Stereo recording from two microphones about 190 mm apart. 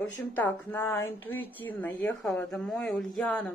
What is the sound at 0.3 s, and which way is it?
A woman's voice, 10° left (ahead or behind).